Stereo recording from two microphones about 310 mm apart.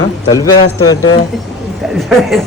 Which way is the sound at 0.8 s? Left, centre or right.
Left.